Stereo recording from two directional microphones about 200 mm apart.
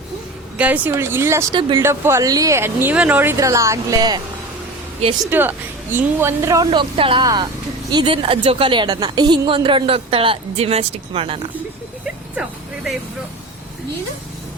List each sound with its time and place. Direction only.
0.5 s speech: 5° right (ahead or behind)
5.2 s speech: 10° right (ahead or behind)
6.7 s a woman's voice: 25° right (ahead or behind)
12.4 s vehicle: centre (ahead or behind)